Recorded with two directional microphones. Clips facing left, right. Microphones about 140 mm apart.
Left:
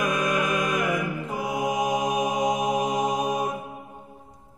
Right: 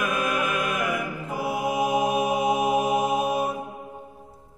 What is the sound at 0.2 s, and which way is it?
Music, 5° right (ahead or behind).